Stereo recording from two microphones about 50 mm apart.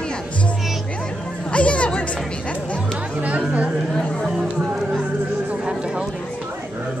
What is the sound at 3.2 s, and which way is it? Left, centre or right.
Speech, right.